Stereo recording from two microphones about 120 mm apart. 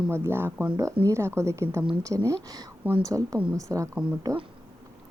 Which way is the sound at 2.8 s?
50° right (ahead or behind).